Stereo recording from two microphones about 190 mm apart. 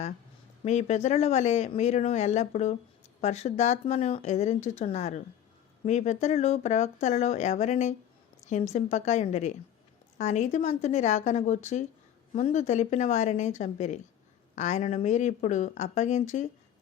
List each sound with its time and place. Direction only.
0.6 s speech: 35° left (ahead or behind)